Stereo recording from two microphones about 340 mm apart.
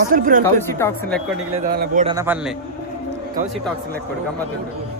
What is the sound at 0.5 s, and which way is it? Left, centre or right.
Speech, centre.